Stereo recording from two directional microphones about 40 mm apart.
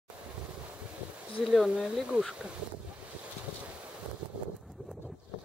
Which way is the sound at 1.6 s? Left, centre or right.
Right.